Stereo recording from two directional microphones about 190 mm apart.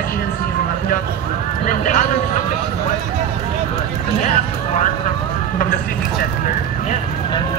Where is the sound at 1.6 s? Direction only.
40° left (ahead or behind).